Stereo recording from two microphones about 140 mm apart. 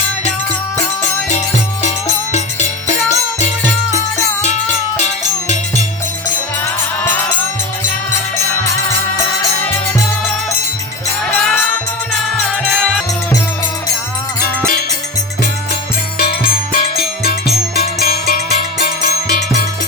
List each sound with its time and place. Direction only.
2.3 s music: 55° left (ahead or behind)
4.4 s music: 55° left (ahead or behind)
11.3 s music: 5° left (ahead or behind)
16.1 s music: 90° left
18.0 s music: 90° left